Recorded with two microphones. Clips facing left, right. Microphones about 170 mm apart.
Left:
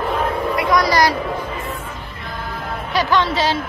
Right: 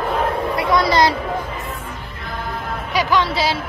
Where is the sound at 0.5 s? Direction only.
25° right (ahead or behind).